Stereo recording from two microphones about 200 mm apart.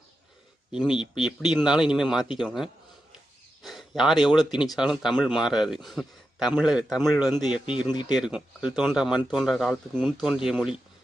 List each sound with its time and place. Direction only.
0.7 s speech: 5° right (ahead or behind)
7.7 s speech: 20° left (ahead or behind)
8.1 s speech: 5° right (ahead or behind)